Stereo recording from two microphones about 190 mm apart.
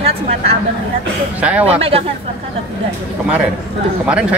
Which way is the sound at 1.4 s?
10° right (ahead or behind).